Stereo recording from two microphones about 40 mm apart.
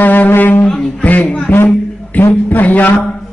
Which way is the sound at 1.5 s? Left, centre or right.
Left.